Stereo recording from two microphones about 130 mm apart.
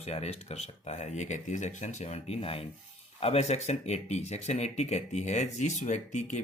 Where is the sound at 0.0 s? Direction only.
55° left (ahead or behind).